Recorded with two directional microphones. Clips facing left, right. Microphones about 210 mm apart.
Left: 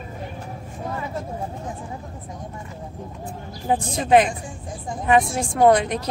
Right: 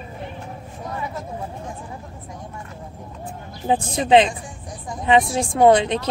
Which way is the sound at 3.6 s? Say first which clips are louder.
Right 2 dB; 25° right (ahead or behind).